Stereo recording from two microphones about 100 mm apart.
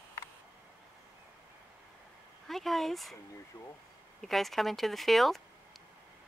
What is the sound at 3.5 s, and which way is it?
Speech, 25° left (ahead or behind).